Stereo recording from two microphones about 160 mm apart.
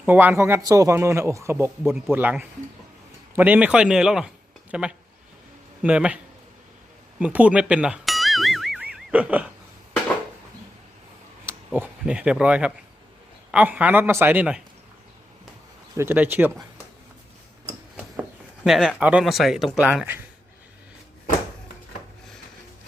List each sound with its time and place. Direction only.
0.0 s a man's voice: 10° right (ahead or behind)
7.2 s music: 10° right (ahead or behind)
11.4 s a man's voice: 10° right (ahead or behind)
16.0 s a man's voice: 10° right (ahead or behind)
17.9 s speech: 5° right (ahead or behind)